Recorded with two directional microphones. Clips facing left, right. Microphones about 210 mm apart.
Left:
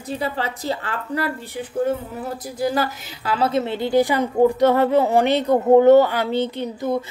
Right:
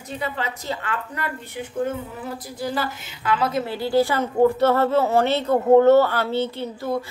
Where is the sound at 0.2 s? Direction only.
35° left (ahead or behind).